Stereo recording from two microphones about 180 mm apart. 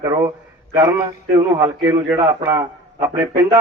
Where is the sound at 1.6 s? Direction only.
15° right (ahead or behind).